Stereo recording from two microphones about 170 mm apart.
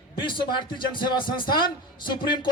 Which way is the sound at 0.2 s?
30° left (ahead or behind).